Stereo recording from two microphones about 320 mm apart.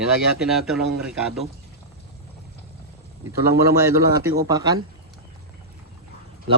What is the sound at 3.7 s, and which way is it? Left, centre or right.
Speech, centre.